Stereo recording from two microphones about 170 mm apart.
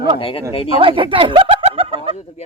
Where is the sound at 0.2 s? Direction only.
30° left (ahead or behind).